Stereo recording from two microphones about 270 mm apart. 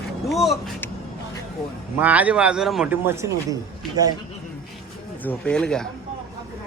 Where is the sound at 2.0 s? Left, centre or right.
Centre.